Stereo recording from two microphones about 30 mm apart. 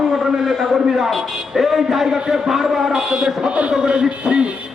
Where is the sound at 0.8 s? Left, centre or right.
Centre.